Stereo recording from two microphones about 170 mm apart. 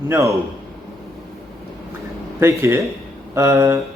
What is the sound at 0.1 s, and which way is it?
Speech, 15° right (ahead or behind).